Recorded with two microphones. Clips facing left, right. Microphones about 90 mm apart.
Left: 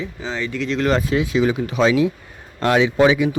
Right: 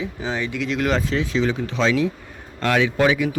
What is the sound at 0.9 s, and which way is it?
A man's voice, 10° left (ahead or behind).